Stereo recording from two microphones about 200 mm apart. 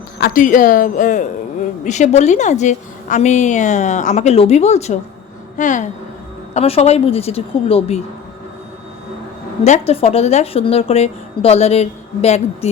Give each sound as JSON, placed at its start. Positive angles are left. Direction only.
{"t": 0.2, "sound": "a woman's voice", "side_deg": 40}
{"t": 9.6, "sound": "a woman's voice", "side_deg": 30}